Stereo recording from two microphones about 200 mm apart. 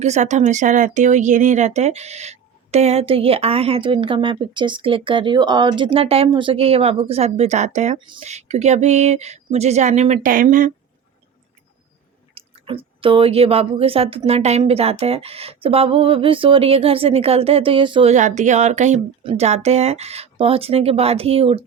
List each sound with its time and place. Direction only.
0.0 s speech: 35° right (ahead or behind)
12.3 s speech: 25° right (ahead or behind)
18.1 s speech: 40° right (ahead or behind)